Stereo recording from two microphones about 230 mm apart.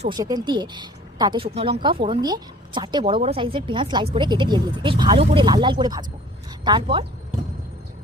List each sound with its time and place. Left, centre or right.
0.0 s speech: centre